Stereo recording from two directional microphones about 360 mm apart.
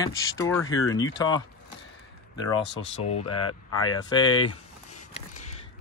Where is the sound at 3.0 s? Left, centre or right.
Centre.